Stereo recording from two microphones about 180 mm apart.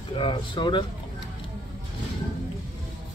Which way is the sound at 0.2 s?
30° left (ahead or behind).